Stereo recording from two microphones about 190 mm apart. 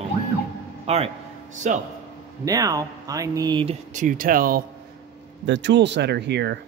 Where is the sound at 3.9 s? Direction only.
45° right (ahead or behind).